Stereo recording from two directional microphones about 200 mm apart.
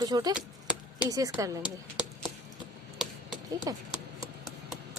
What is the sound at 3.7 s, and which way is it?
Speech, 15° right (ahead or behind).